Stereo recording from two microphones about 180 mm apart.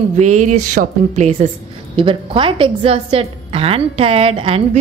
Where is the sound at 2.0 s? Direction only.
30° right (ahead or behind).